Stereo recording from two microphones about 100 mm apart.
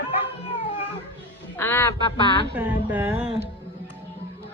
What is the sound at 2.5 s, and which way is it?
Speech, 15° right (ahead or behind).